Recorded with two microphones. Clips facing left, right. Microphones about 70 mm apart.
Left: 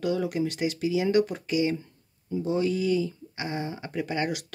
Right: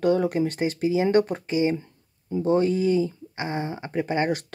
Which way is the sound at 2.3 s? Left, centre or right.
Right.